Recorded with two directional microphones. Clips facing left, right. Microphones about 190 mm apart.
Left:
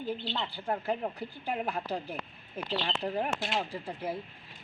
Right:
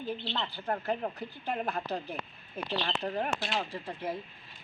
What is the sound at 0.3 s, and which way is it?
Speech, 10° left (ahead or behind).